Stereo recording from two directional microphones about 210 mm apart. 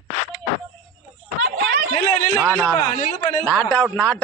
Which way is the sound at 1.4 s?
50° right (ahead or behind).